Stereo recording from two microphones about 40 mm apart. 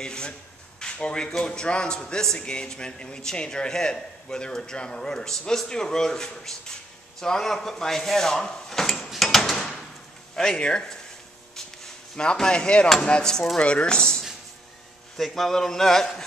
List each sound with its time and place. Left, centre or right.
0.0 s speech: left
0.7 s a sound: left
1.4 s a man's voice: left
8.6 s a sound: centre
10.3 s a man's voice: centre
12.4 s a man's voice: left
15.1 s a man's voice: centre